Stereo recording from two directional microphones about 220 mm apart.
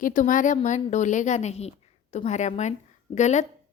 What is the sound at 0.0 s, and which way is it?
A woman's voice, 35° left (ahead or behind).